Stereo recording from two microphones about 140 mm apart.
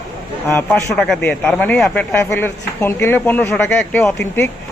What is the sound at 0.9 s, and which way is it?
Speech, centre (ahead or behind).